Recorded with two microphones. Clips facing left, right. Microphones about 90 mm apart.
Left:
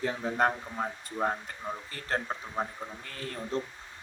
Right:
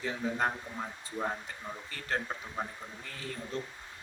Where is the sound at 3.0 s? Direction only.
50° left (ahead or behind).